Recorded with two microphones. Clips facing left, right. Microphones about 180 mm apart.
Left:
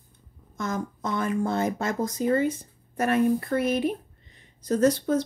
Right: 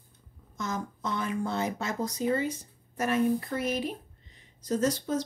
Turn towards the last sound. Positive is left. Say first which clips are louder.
# left 6 dB
turn(degrees=60)  # may be behind; listen again after turning